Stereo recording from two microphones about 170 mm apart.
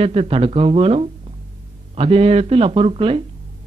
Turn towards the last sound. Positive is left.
turn(degrees=-35)  # may be behind; listen again after turning